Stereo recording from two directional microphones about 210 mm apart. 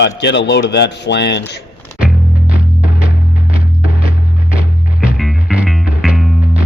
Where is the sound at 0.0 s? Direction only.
55° left (ahead or behind).